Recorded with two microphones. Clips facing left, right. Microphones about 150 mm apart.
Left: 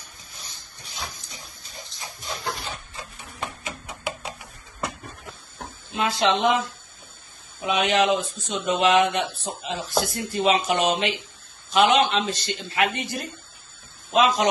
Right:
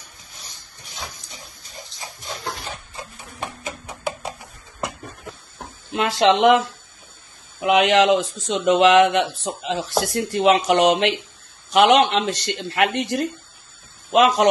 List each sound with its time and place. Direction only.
5.9 s speech: 75° right (ahead or behind)
7.6 s speech: 85° right; by 14.5 s 65° right (ahead or behind)